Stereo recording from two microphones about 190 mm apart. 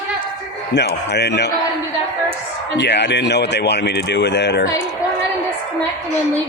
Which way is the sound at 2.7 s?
65° left (ahead or behind).